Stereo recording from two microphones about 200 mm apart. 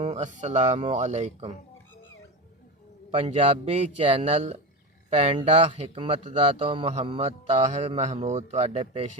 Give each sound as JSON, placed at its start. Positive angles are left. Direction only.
{"t": 0.0, "sound": "a man's voice", "side_deg": -35}
{"t": 3.2, "sound": "a man's voice", "side_deg": -35}